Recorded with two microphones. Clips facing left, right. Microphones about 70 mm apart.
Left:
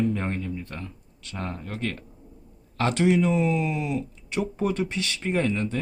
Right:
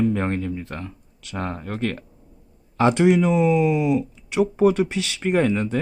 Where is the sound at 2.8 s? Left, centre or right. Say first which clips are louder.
Right 5 dB; centre.